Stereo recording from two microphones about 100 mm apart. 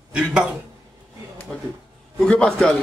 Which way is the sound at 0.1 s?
10° right (ahead or behind).